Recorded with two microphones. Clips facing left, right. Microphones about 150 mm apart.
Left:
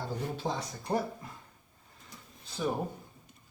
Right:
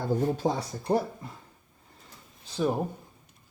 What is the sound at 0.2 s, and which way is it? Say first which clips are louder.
Speech: right 6 dB; 45° right (ahead or behind).